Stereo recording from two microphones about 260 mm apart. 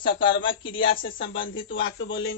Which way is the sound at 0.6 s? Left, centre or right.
Left.